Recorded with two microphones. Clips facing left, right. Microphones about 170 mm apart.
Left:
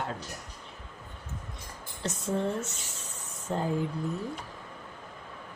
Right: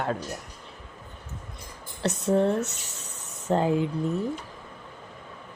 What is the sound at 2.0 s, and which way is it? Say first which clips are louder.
Speech: right 7 dB; 70° right (ahead or behind).